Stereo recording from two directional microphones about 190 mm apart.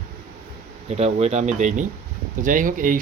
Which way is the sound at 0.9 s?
35° right (ahead or behind).